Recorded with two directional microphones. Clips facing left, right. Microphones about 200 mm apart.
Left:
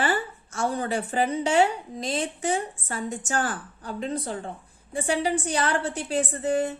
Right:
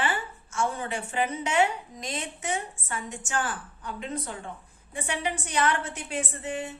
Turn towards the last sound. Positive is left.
turn(degrees=40)  # may be behind; listen again after turning